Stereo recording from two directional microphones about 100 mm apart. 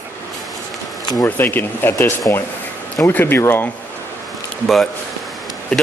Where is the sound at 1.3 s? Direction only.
20° left (ahead or behind).